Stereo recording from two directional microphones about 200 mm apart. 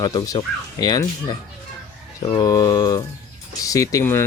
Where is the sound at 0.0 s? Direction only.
20° left (ahead or behind).